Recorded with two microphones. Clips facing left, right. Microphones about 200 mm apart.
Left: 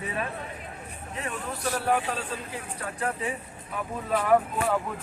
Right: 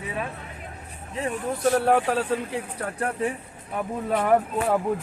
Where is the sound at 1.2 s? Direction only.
25° right (ahead or behind).